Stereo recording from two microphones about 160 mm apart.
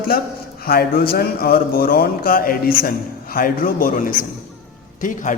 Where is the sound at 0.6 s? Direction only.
75° left (ahead or behind).